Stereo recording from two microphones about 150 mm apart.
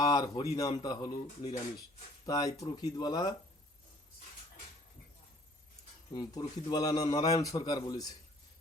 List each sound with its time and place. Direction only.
0.0 s speech: 25° left (ahead or behind)
6.1 s speech: 25° left (ahead or behind)